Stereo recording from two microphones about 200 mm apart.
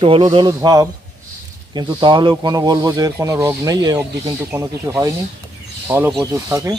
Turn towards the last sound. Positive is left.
turn(degrees=-15)  # may be behind; listen again after turning